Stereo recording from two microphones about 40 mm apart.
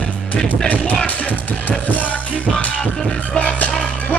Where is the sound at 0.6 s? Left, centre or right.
Left.